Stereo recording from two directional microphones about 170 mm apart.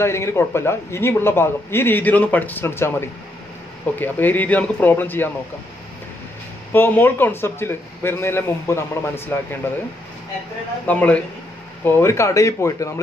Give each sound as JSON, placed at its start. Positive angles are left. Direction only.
{"t": 0.0, "sound": "a man's voice", "side_deg": 15}
{"t": 6.7, "sound": "a man's voice", "side_deg": 10}
{"t": 10.9, "sound": "a man's voice", "side_deg": 10}